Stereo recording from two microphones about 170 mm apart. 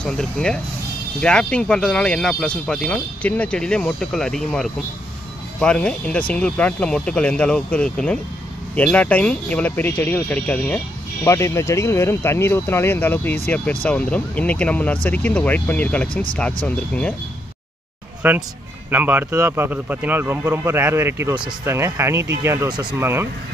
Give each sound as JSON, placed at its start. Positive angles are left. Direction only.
{"t": 0.0, "sound": "speech", "side_deg": 5}
{"t": 18.2, "sound": "speech", "side_deg": -10}
{"t": 22.9, "sound": "speech", "side_deg": -15}